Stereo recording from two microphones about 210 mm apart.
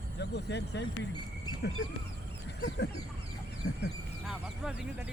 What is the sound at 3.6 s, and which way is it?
Duck, 50° left (ahead or behind).